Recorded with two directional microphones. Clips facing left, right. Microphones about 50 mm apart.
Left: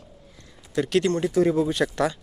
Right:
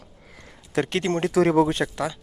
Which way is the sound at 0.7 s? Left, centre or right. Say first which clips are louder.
Left 1 dB; right.